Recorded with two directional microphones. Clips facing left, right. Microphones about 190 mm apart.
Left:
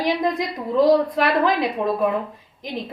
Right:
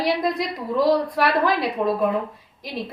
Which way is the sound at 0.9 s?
20° left (ahead or behind).